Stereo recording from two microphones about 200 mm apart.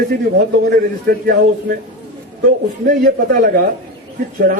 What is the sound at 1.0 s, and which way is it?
Speech, 50° right (ahead or behind).